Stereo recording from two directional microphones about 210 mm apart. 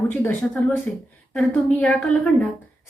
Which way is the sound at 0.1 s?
5° left (ahead or behind).